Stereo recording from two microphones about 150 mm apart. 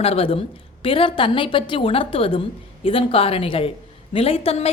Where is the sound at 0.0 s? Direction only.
40° left (ahead or behind).